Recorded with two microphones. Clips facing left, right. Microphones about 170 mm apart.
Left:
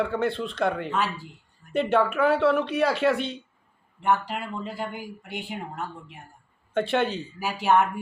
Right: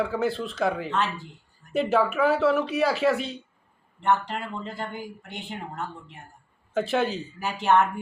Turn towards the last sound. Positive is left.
turn(degrees=10)  # may be behind; listen again after turning